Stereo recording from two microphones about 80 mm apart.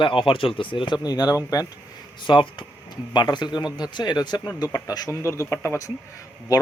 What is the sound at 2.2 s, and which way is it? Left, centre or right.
Speech, left.